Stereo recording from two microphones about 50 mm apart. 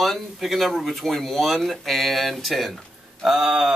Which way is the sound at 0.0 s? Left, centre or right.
Centre.